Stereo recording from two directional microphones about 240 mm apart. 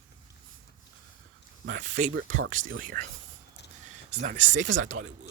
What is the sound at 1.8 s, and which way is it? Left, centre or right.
Speech, right.